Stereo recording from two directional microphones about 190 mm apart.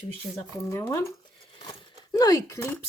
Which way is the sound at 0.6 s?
15° left (ahead or behind).